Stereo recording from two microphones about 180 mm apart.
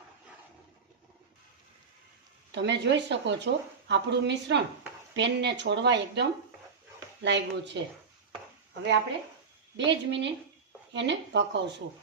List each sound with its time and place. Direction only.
2.5 s a woman's voice: 75° right (ahead or behind)
9.7 s a woman's voice: 80° right